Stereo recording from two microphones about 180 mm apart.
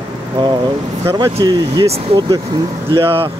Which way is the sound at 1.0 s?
25° right (ahead or behind).